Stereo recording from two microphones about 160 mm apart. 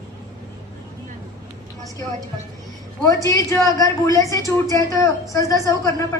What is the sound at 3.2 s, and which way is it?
A woman's voice, 20° left (ahead or behind).